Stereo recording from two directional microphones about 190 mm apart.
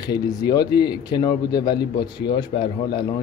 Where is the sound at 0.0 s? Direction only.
20° left (ahead or behind).